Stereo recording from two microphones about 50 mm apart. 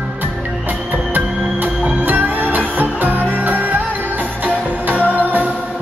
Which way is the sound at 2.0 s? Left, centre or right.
Right.